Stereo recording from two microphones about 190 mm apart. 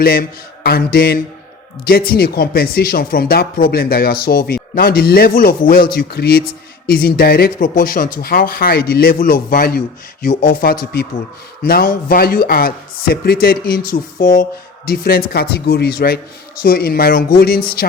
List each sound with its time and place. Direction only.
0.0 s speech: 50° left (ahead or behind)